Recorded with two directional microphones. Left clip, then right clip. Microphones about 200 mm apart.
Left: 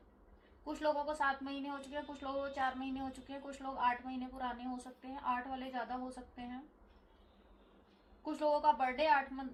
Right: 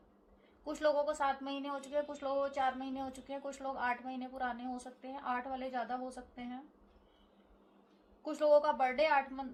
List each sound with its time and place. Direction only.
0.6 s a woman's voice: 45° right (ahead or behind)
8.2 s a woman's voice: 45° right (ahead or behind)